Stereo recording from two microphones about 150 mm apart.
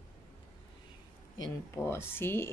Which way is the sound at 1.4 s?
20° left (ahead or behind).